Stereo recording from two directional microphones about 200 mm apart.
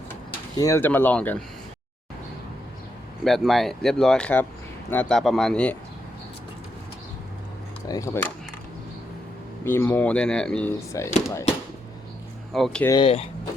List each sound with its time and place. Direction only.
0.5 s speech: 15° left (ahead or behind)
3.2 s speech: centre (ahead or behind)
7.9 s speech: 15° left (ahead or behind)
9.6 s speech: 10° left (ahead or behind)
12.5 s speech: 5° left (ahead or behind)
12.9 s speech: 25° left (ahead or behind)